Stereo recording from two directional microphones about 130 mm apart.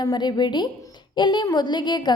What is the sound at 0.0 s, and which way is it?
Speech, 35° left (ahead or behind).